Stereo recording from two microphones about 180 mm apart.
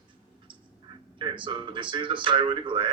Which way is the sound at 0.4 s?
25° right (ahead or behind).